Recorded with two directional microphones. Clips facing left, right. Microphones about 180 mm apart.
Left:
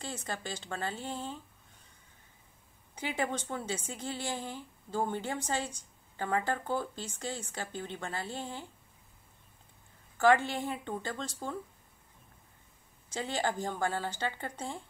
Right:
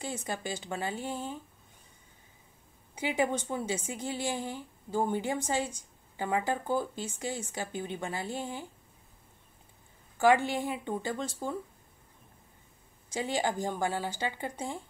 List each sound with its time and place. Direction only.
0.0 s a woman's voice: 10° right (ahead or behind)
3.0 s a woman's voice: 15° right (ahead or behind)
10.1 s a woman's voice: 15° right (ahead or behind)
13.1 s a woman's voice: 15° right (ahead or behind)